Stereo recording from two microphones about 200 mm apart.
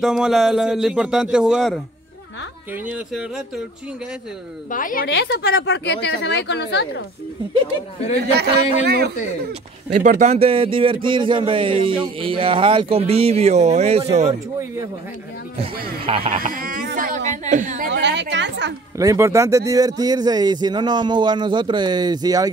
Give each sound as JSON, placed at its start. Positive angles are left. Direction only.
{"t": 0.0, "sound": "a man's voice", "side_deg": 0}
{"t": 4.6, "sound": "a woman's voice", "side_deg": 40}
{"t": 5.0, "sound": "a woman's voice", "side_deg": 60}
{"t": 8.2, "sound": "a man's voice", "side_deg": -55}
{"t": 10.0, "sound": "speech", "side_deg": -35}
{"t": 15.8, "sound": "speech", "side_deg": -25}
{"t": 16.4, "sound": "speech", "side_deg": -45}
{"t": 17.9, "sound": "a woman's voice", "side_deg": -60}
{"t": 18.9, "sound": "speech", "side_deg": -15}